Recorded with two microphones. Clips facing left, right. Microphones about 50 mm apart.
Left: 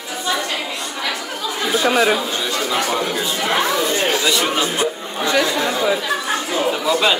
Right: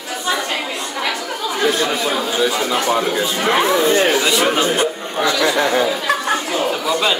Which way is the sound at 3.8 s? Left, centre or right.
Right.